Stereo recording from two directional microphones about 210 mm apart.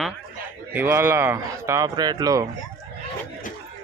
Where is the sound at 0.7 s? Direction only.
10° right (ahead or behind).